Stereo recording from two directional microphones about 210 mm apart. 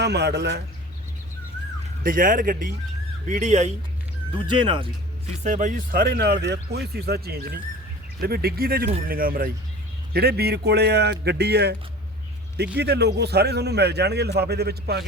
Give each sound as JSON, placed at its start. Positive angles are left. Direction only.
{"t": 0.0, "sound": "a man's voice", "side_deg": -55}
{"t": 2.0, "sound": "a man's voice", "side_deg": -40}
{"t": 4.4, "sound": "speech", "side_deg": -20}
{"t": 5.4, "sound": "a man's voice", "side_deg": -35}